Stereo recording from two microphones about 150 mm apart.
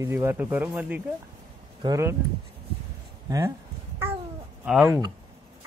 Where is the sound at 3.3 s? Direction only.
20° right (ahead or behind).